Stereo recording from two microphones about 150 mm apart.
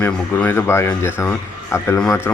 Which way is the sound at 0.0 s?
15° left (ahead or behind).